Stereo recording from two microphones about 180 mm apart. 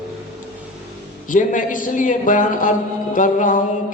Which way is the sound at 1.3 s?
45° left (ahead or behind).